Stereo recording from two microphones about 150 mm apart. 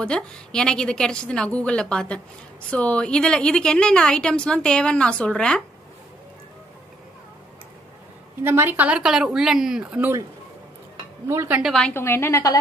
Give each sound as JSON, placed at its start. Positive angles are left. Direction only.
{"t": 0.0, "sound": "a woman's voice", "side_deg": 5}
{"t": 8.5, "sound": "a woman's voice", "side_deg": -15}
{"t": 11.2, "sound": "speech", "side_deg": -15}
{"t": 11.9, "sound": "a woman's voice", "side_deg": 15}